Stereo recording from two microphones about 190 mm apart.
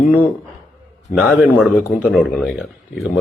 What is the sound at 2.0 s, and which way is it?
Speech, centre (ahead or behind).